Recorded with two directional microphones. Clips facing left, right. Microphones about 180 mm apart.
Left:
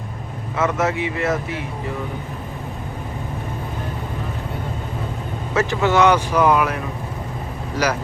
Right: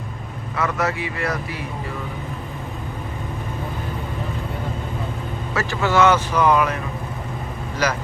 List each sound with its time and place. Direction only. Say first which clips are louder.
0.5 s speech: left 3 dB; 20° left (ahead or behind)
5.5 s speech: left 2 dB; 20° left (ahead or behind)
7.8 s speech: left 1 dB; 10° left (ahead or behind)